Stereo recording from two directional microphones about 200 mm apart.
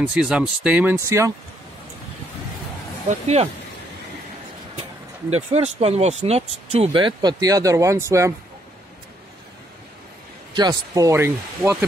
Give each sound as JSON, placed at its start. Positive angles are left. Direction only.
{"t": 0.0, "sound": "speech", "side_deg": -5}
{"t": 3.1, "sound": "speech", "side_deg": -35}
{"t": 5.3, "sound": "speech", "side_deg": -30}
{"t": 10.5, "sound": "speech", "side_deg": -20}